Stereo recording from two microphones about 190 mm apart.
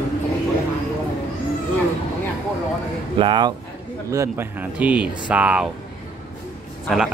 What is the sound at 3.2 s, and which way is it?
Speech, 25° right (ahead or behind).